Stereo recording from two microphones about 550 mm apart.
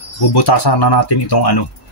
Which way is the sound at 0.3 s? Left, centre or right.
Left.